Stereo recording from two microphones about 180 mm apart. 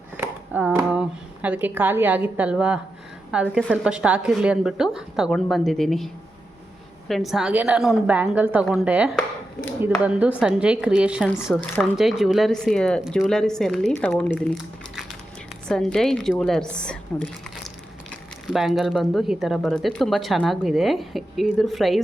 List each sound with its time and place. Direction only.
0.2 s speech: 10° right (ahead or behind)
7.1 s speech: centre (ahead or behind)
18.4 s speech: centre (ahead or behind)